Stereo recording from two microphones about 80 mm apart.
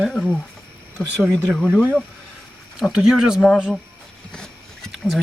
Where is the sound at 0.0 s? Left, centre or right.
Centre.